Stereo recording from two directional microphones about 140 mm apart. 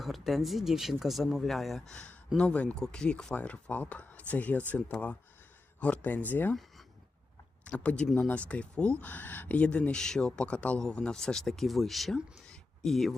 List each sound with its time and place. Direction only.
0.0 s speech: centre (ahead or behind)
7.6 s speech: 10° left (ahead or behind)